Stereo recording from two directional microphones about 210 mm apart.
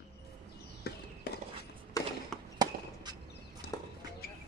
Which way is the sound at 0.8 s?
50° left (ahead or behind).